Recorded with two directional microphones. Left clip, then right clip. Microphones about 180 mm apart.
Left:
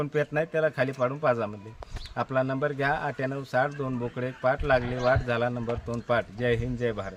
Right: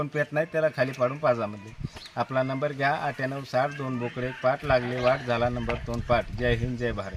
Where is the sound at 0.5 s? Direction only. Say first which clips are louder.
Even; 10° left (ahead or behind).